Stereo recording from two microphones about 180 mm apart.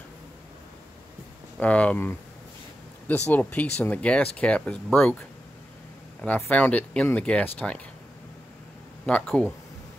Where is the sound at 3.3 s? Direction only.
10° left (ahead or behind).